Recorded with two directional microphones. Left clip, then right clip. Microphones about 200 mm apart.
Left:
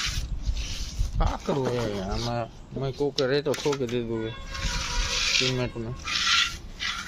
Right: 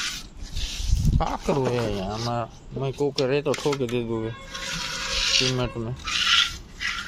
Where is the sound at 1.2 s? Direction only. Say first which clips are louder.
Right 3 dB; 20° right (ahead or behind).